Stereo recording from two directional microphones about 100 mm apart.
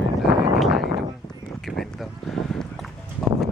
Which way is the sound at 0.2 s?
Centre (ahead or behind).